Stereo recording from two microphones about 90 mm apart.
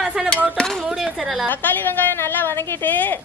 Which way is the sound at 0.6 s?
5° left (ahead or behind).